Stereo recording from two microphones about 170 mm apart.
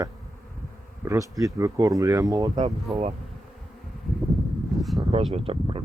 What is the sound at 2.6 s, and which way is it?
Speech, 35° right (ahead or behind).